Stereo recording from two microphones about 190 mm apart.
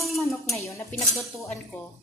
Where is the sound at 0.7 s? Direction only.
15° left (ahead or behind).